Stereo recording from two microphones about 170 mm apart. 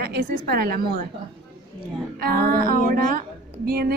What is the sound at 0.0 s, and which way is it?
Speech, 65° right (ahead or behind).